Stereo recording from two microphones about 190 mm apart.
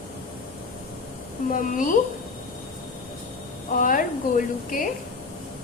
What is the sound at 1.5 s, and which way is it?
Speech, 45° left (ahead or behind).